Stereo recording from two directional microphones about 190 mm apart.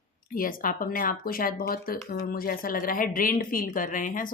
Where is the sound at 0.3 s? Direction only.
45° left (ahead or behind).